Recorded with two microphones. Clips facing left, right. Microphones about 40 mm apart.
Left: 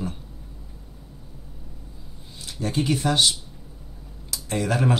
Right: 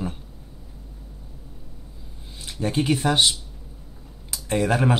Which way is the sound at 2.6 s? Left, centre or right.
Centre.